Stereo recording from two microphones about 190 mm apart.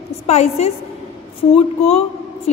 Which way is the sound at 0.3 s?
35° left (ahead or behind).